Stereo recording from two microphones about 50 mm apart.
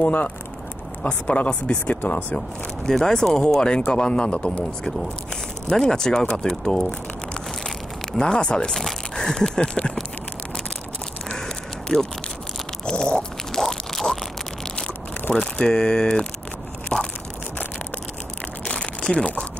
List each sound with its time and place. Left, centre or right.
0.0 s speech: left
3.0 s speech: centre
5.8 s speech: centre
8.2 s speech: centre
8.7 s biting: centre
9.2 s a sound: centre
11.3 s a sound: centre
12.8 s stomach rumble: centre
13.6 s a sound: centre
15.5 s speech: centre
16.9 s crushing: left
18.6 s crumpling: left